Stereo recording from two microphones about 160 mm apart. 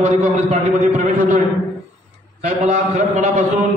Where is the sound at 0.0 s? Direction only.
50° right (ahead or behind).